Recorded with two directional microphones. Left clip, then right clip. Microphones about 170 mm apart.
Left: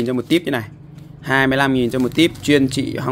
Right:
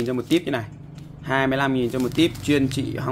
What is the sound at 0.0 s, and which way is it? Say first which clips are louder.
Speech: left 4 dB; 50° left (ahead or behind).